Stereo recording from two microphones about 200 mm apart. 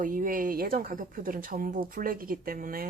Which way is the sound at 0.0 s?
40° right (ahead or behind).